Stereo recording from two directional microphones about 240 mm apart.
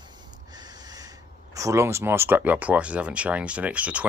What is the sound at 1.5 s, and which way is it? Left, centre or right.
Speech, centre.